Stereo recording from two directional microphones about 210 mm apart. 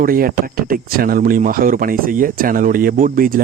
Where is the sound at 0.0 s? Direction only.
45° right (ahead or behind).